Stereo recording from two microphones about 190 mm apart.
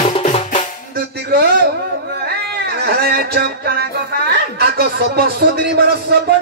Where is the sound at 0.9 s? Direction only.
60° right (ahead or behind).